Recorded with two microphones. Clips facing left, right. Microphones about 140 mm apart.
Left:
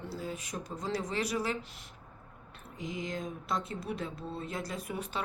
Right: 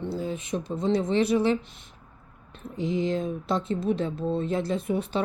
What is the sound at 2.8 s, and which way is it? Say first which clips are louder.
Speech: right 11 dB; 30° right (ahead or behind).